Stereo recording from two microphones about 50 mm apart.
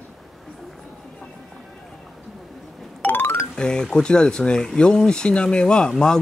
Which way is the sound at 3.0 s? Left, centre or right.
Left.